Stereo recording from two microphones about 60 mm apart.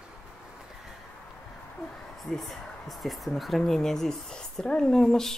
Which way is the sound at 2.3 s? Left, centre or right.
Centre.